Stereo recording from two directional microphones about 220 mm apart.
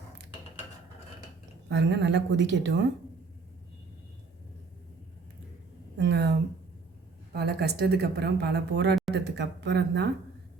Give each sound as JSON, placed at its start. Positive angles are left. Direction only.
{"t": 1.7, "sound": "a woman's voice", "side_deg": -55}
{"t": 6.0, "sound": "speech", "side_deg": -50}
{"t": 7.3, "sound": "speech", "side_deg": -50}